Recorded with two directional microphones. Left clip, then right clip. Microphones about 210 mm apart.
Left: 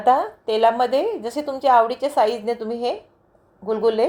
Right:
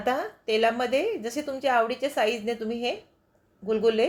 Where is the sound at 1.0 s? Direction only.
40° left (ahead or behind).